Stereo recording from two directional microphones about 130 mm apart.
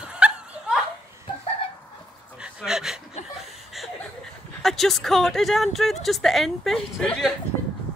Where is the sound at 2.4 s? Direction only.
5° right (ahead or behind).